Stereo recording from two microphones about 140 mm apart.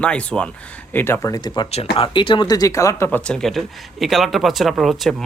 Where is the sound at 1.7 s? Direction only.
45° left (ahead or behind); by 5.2 s centre (ahead or behind).